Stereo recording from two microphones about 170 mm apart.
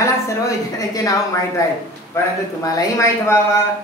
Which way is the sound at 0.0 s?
20° left (ahead or behind).